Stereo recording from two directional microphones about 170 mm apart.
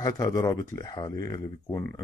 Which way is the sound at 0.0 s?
20° left (ahead or behind).